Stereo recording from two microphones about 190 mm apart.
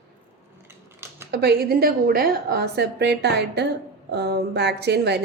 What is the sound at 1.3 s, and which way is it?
A woman's voice, 60° right (ahead or behind).